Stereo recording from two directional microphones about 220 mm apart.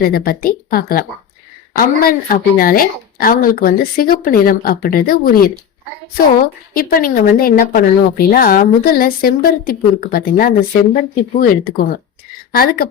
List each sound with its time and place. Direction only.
0.0 s a woman's voice: 45° left (ahead or behind)
6.7 s a woman's voice: 40° left (ahead or behind)